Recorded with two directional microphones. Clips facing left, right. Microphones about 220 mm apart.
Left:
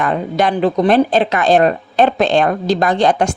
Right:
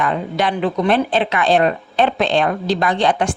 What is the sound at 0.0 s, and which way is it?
Speech, 45° left (ahead or behind).